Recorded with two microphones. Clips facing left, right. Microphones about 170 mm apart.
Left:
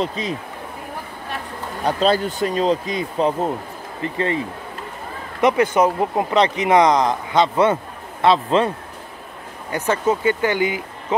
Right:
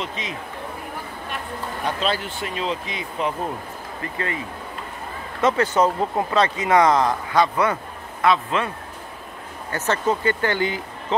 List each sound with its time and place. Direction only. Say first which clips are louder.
0.0 s speech: left 7 dB; 35° left (ahead or behind)
1.9 s speech: left 7 dB; 40° left (ahead or behind)
5.4 s speech: left 3 dB; 15° left (ahead or behind); by 8.7 s 30° left (ahead or behind)
9.7 s speech: left 3 dB; 10° left (ahead or behind)